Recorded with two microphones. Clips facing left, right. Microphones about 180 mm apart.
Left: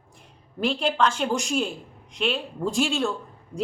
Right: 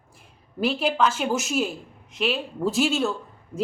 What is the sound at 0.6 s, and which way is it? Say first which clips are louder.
A woman's voice: right 1 dB; 5° right (ahead or behind).